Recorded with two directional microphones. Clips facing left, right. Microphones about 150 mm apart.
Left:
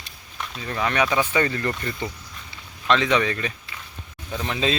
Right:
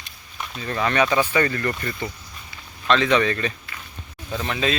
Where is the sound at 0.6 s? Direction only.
10° left (ahead or behind).